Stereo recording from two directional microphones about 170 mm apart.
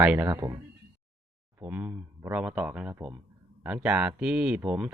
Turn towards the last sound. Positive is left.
turn(degrees=-5)  # may be behind; listen again after turning